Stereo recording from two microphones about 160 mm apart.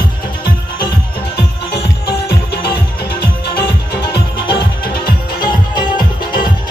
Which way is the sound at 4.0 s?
30° left (ahead or behind).